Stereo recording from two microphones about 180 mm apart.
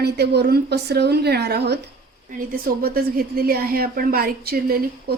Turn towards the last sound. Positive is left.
turn(degrees=-60)  # may be behind; listen again after turning